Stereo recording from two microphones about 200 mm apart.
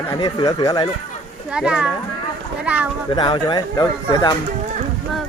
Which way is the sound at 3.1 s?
25° left (ahead or behind).